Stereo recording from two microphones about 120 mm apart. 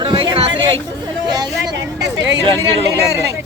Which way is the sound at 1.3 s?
35° right (ahead or behind).